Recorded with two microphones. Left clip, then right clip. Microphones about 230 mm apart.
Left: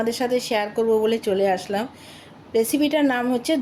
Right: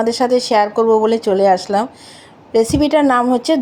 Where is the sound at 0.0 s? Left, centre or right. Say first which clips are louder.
Right 8 dB; centre.